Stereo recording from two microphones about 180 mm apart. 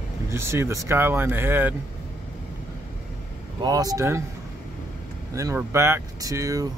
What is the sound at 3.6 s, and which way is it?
Speech, 20° right (ahead or behind).